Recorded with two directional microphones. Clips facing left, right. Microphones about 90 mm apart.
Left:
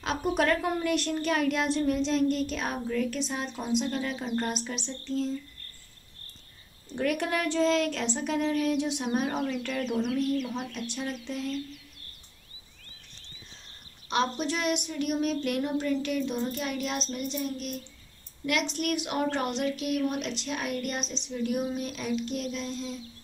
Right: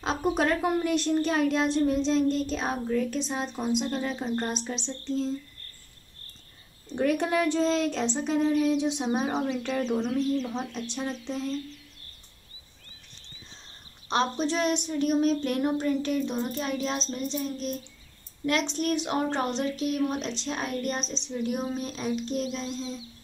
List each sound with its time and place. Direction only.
0.0 s child singing: 25° right (ahead or behind)
7.0 s child singing: 25° right (ahead or behind)
14.0 s a woman's voice: 30° right (ahead or behind)
16.0 s child singing: 30° right (ahead or behind)
21.0 s speech: 15° left (ahead or behind)
21.7 s child singing: 25° right (ahead or behind)